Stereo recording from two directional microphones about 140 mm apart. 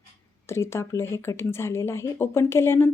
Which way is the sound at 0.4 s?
20° left (ahead or behind).